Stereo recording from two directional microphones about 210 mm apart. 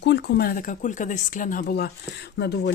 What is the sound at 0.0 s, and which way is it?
Speech, 55° left (ahead or behind).